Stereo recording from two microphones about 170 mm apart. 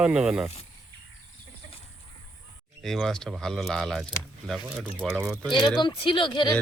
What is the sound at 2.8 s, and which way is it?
Speech, 5° left (ahead or behind).